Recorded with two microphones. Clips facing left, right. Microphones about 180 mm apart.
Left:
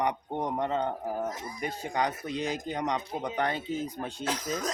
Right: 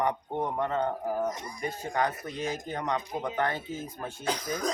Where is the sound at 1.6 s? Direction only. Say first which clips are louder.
Even; 20° left (ahead or behind).